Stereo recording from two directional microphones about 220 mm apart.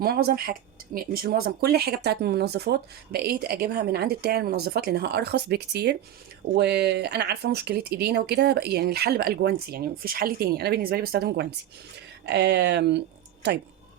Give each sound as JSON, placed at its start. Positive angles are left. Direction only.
{"t": 0.0, "sound": "speech", "side_deg": -45}